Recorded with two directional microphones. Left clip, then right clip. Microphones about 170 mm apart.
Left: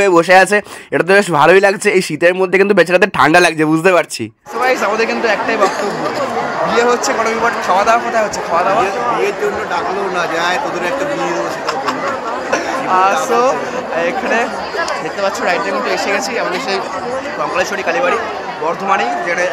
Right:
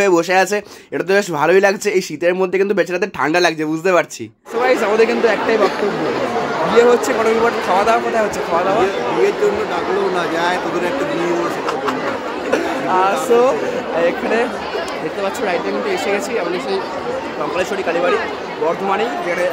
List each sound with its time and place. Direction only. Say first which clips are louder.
0.0 s speech: left 5 dB; 25° left (ahead or behind)
4.6 s a man's voice: even; 15° right (ahead or behind)
6.7 s a man's voice: right 2 dB; 15° right (ahead or behind)
10.1 s a man's voice: left 2 dB; 15° right (ahead or behind)
13.0 s a man's voice: even; 15° right (ahead or behind)
17.6 s a man's voice: left 2 dB; 10° right (ahead or behind)